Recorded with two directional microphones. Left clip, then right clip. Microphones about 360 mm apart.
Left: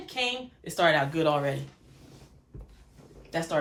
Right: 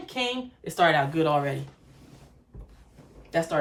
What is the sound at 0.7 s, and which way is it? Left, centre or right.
Speech, centre.